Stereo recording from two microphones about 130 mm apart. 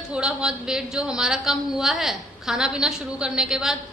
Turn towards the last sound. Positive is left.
turn(degrees=-5)  # may be behind; listen again after turning